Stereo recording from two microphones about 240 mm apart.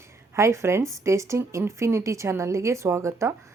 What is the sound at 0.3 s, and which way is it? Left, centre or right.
A woman's voice, centre.